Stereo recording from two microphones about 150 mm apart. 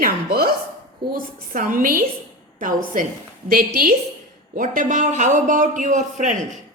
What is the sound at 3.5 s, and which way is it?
Speech, 70° right (ahead or behind).